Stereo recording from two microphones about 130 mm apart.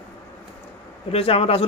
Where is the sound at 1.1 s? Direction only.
50° left (ahead or behind).